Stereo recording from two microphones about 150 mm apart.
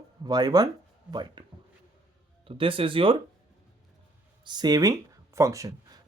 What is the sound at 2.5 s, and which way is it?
Speech, 35° right (ahead or behind).